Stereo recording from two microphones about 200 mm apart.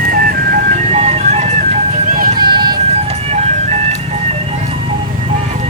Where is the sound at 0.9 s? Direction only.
30° right (ahead or behind).